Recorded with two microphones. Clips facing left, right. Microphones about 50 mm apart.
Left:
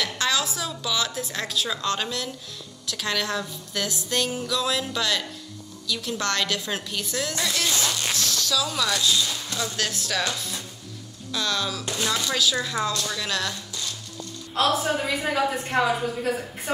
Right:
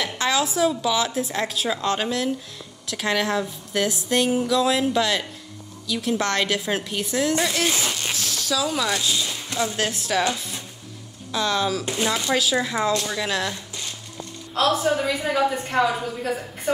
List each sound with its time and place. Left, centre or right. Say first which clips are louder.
0.0 s a woman's voice: right 3 dB; right
14.5 s a woman's voice: right 2 dB; centre